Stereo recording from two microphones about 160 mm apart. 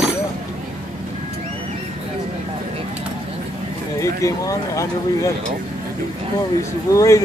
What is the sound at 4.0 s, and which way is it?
Speech, 20° left (ahead or behind).